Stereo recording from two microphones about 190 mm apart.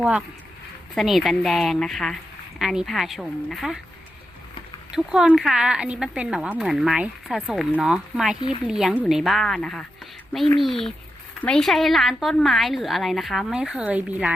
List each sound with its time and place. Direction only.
0.0 s a woman's voice: 5° right (ahead or behind)
4.9 s a woman's voice: centre (ahead or behind)